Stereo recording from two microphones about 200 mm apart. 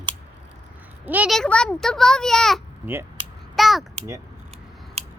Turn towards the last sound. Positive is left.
turn(degrees=-30)  # may be behind; listen again after turning